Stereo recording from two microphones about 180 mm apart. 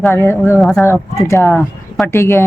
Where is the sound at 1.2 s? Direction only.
15° left (ahead or behind).